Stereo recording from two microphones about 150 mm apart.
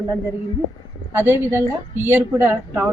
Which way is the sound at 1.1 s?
15° right (ahead or behind).